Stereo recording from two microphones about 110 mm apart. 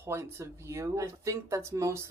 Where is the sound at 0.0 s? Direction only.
25° right (ahead or behind).